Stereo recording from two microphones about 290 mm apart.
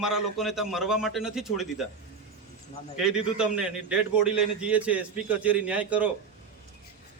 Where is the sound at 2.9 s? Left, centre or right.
Centre.